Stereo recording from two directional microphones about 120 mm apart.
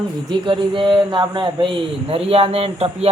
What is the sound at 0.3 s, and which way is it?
Speech, 45° right (ahead or behind).